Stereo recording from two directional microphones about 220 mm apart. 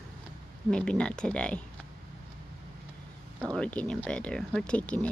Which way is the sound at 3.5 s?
5° left (ahead or behind).